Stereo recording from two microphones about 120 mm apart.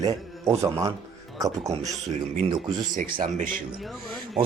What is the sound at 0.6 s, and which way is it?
Speech, 25° right (ahead or behind).